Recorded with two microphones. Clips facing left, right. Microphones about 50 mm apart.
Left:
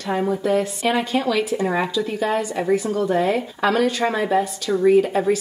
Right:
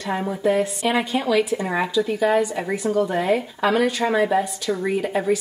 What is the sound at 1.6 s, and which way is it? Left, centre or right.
Speech, centre.